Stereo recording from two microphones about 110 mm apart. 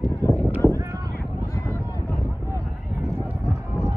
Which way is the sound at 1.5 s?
20° left (ahead or behind).